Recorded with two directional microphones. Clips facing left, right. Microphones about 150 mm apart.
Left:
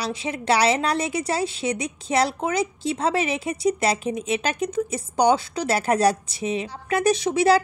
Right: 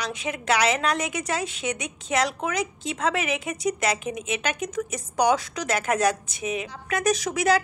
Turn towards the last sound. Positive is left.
turn(degrees=30)  # may be behind; listen again after turning